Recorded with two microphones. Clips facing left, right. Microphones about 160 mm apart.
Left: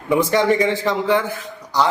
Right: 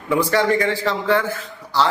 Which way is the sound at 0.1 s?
20° left (ahead or behind).